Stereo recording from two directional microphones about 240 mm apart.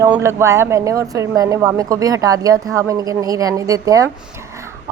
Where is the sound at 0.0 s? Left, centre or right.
Centre.